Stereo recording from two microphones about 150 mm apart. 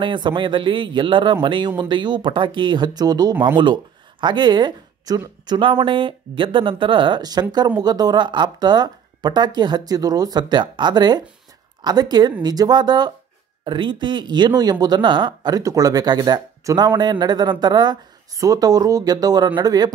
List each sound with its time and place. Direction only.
0.0 s speech: 30° right (ahead or behind)